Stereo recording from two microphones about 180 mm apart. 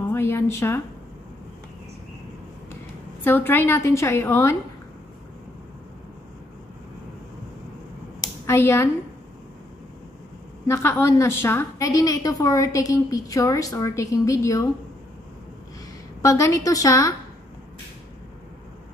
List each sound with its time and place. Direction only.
0.1 s a sound: 15° left (ahead or behind)
3.3 s a woman's voice: 10° left (ahead or behind)
8.5 s a woman's voice: 15° left (ahead or behind)
10.7 s a woman's voice: 15° left (ahead or behind)
16.2 s a woman's voice: 15° left (ahead or behind)